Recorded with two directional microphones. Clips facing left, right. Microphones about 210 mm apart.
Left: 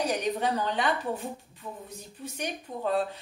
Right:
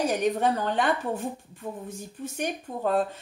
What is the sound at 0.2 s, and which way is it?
Speech, 50° right (ahead or behind).